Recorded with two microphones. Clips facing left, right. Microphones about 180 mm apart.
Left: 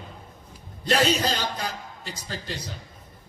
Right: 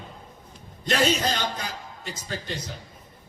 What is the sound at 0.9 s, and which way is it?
A man's voice, 35° left (ahead or behind).